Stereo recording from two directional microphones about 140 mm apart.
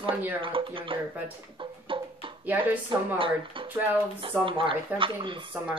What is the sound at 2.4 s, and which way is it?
Speech, 15° right (ahead or behind).